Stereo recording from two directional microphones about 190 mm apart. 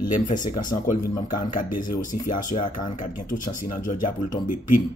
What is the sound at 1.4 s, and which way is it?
Speech, 45° left (ahead or behind).